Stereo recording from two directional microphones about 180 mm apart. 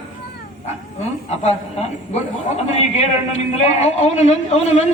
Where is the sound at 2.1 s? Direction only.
35° left (ahead or behind).